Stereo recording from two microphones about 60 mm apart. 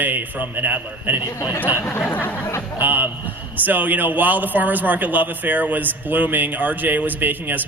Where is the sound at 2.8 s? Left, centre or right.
Right.